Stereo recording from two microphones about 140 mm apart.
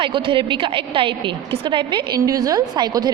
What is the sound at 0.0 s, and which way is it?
A woman's voice, 35° right (ahead or behind).